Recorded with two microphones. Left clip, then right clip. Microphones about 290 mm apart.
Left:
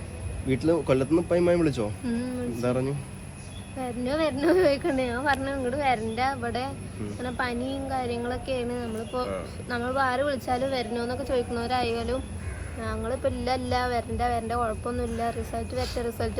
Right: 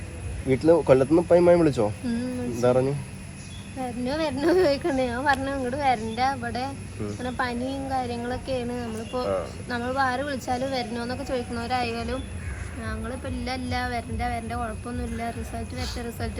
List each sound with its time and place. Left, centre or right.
0.5 s speech: centre
3.8 s speech: centre